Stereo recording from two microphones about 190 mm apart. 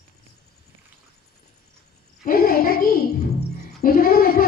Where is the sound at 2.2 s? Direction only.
50° left (ahead or behind).